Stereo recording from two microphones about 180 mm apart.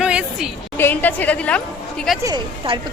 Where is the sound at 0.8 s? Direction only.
10° left (ahead or behind).